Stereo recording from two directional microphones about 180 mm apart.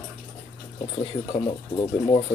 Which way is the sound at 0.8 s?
30° left (ahead or behind).